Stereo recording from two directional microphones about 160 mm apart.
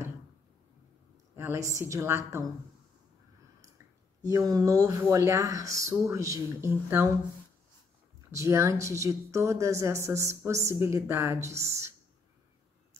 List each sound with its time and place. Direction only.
1.3 s a sound: 15° right (ahead or behind)
1.8 s speech: 15° right (ahead or behind)
3.6 s speech: 20° right (ahead or behind)
8.3 s speech: 20° right (ahead or behind)